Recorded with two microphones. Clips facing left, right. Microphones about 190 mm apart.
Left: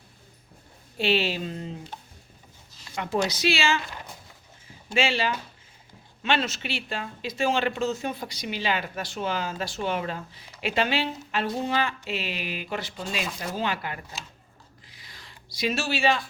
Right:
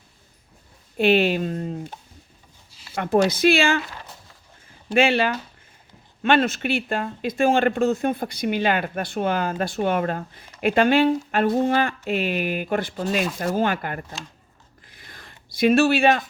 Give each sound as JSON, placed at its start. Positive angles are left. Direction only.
{"t": 0.9, "sound": "speech", "side_deg": -55}
{"t": 2.9, "sound": "speech", "side_deg": -55}
{"t": 4.9, "sound": "speech", "side_deg": -55}
{"t": 14.8, "sound": "a sound", "side_deg": -55}